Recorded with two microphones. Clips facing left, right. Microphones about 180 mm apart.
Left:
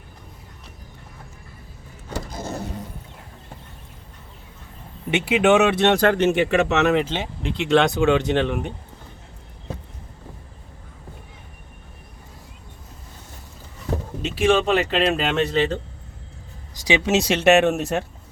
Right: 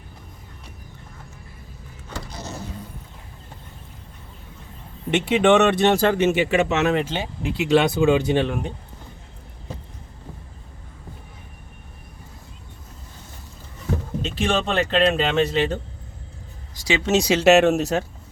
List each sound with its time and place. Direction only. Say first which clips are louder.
2.0 s vehicle: left 4 dB; 50° left (ahead or behind)
5.1 s speech: even; 5° left (ahead or behind)
14.2 s speech: left 5 dB; 10° left (ahead or behind)
16.8 s speech: left 2 dB; 15° left (ahead or behind)
17.1 s speech: right 2 dB; centre (ahead or behind)